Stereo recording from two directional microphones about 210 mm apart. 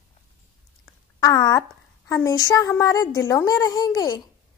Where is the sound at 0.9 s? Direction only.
20° left (ahead or behind).